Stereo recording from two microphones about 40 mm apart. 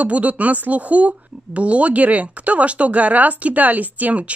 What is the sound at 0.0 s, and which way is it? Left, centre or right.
Speech, right.